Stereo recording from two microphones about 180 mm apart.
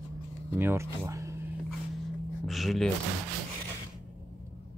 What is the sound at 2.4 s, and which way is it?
Speech, centre (ahead or behind).